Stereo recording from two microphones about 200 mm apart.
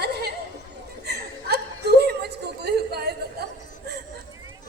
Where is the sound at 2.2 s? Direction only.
55° right (ahead or behind).